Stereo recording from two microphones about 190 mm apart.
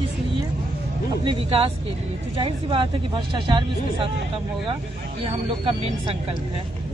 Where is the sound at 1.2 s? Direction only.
25° right (ahead or behind).